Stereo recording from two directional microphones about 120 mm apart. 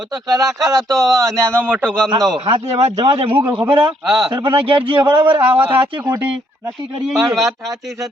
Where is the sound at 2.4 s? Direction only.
40° right (ahead or behind).